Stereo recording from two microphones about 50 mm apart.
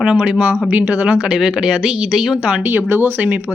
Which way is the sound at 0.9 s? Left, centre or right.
Right.